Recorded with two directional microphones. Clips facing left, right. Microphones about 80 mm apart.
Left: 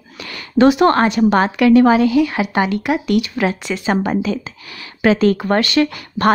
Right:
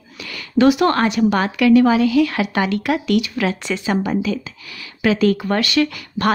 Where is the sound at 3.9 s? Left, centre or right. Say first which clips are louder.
Left 2 dB; left.